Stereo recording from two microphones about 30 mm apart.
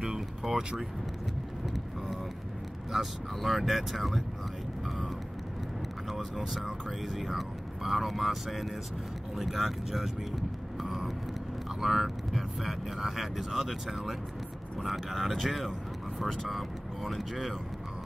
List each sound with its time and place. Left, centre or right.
0.1 s a sound: centre
2.9 s speech: centre
6.0 s speech: centre
10.8 s vehicle: centre
13.0 s speech: centre